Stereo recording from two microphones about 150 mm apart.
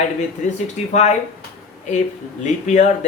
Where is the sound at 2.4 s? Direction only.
50° left (ahead or behind).